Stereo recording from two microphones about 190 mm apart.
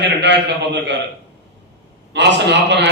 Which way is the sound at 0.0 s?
65° right (ahead or behind).